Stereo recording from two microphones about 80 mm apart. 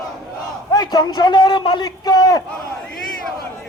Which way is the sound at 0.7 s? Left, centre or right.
Left.